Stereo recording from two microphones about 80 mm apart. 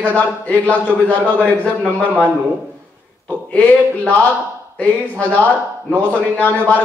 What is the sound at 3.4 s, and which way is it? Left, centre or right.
A man's voice, centre.